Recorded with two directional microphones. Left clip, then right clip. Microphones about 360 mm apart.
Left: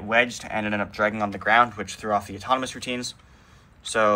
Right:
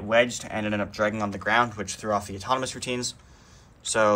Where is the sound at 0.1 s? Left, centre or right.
Centre.